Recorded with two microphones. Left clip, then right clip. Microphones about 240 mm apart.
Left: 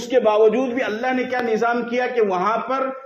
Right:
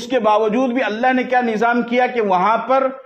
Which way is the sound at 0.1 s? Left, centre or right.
Right.